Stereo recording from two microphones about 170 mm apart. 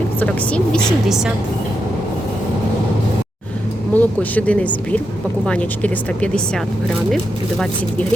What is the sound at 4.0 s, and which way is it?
Speech, 10° left (ahead or behind).